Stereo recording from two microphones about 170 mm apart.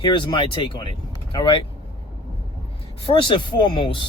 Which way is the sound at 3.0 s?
30° left (ahead or behind).